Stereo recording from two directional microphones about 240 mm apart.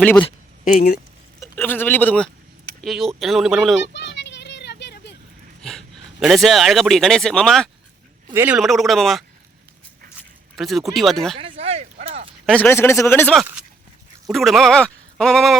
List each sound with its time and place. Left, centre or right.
0.0 s speech: centre
0.6 s speech: left
1.4 s speech: centre
3.9 s a sound: left
5.6 s speech: centre
8.3 s speech: centre
10.5 s speech: centre
11.3 s speech: right
12.5 s speech: centre